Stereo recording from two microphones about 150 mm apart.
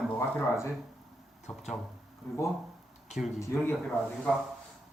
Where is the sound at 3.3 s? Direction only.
20° left (ahead or behind).